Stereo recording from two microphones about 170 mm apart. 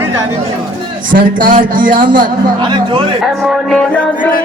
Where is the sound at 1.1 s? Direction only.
55° right (ahead or behind).